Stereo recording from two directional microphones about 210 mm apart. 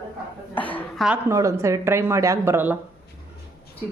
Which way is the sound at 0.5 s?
5° left (ahead or behind).